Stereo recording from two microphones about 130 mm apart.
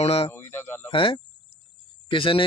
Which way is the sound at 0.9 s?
45° left (ahead or behind).